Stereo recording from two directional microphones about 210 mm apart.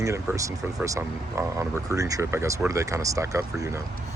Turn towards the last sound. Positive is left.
turn(degrees=-15)  # may be behind; listen again after turning